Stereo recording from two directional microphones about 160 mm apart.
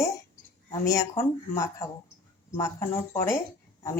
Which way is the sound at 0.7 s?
20° left (ahead or behind).